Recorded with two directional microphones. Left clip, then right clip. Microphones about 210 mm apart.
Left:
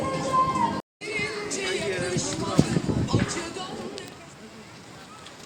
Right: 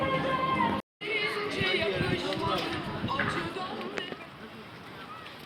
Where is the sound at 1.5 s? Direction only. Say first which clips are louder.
Even; 60° left (ahead or behind).